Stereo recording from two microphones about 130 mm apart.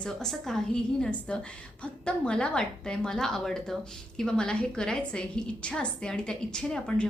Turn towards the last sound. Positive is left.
turn(degrees=5)  # may be behind; listen again after turning